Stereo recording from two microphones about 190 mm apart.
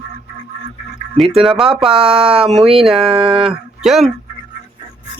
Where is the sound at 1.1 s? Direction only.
Centre (ahead or behind).